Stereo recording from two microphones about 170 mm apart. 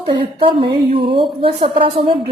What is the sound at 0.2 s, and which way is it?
A woman's voice, 30° right (ahead or behind).